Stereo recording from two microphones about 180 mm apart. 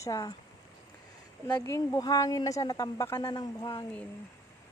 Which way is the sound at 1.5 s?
15° left (ahead or behind).